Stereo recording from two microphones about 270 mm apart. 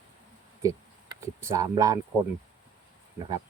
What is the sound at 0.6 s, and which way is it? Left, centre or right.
Speech, centre.